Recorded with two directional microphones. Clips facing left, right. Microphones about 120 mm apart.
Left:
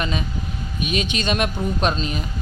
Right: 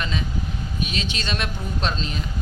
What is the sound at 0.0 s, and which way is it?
Speech, 15° left (ahead or behind).